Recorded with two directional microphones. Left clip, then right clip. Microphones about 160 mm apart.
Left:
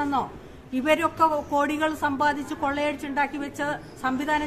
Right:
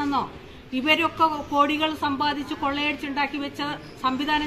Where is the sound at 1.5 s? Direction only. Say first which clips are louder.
Right 2 dB; 20° left (ahead or behind).